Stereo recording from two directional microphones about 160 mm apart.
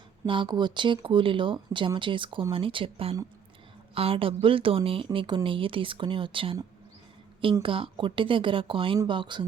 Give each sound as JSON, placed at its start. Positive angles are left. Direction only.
{"t": 0.3, "sound": "speech", "side_deg": -30}